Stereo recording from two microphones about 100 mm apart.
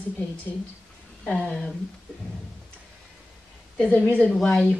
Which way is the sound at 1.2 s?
10° left (ahead or behind).